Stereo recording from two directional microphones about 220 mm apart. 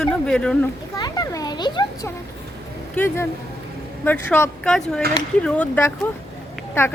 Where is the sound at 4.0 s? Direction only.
10° left (ahead or behind).